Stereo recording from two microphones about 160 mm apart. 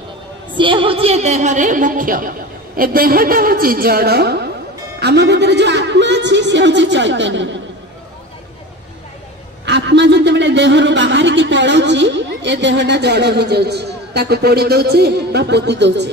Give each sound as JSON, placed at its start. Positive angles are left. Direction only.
{"t": 0.6, "sound": "a woman's voice", "side_deg": -30}
{"t": 9.7, "sound": "speech", "side_deg": -90}